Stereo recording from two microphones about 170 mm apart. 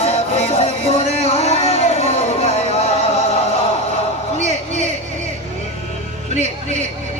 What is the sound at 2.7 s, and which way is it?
Music, 40° left (ahead or behind).